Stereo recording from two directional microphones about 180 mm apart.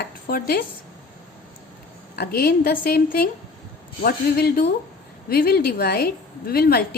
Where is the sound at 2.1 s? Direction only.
55° left (ahead or behind).